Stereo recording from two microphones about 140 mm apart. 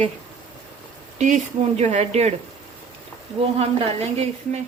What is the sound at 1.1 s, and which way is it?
Speech, 60° right (ahead or behind).